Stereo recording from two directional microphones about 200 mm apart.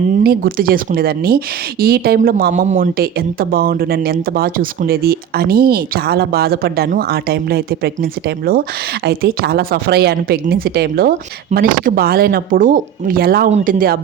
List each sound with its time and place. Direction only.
0.2 s speech: 50° right (ahead or behind)
9.0 s speech: 50° right (ahead or behind)